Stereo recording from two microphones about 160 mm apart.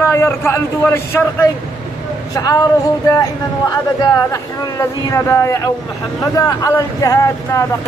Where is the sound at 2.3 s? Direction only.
20° left (ahead or behind).